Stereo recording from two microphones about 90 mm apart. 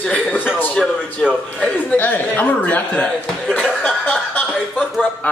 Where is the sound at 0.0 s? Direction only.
15° left (ahead or behind).